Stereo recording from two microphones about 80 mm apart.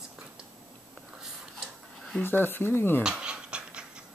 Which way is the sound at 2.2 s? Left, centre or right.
Left.